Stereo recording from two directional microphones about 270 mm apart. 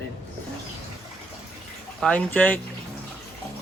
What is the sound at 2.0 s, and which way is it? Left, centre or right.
Speech, centre.